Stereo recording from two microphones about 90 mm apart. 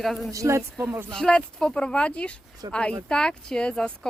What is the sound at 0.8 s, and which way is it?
Speech, 15° right (ahead or behind).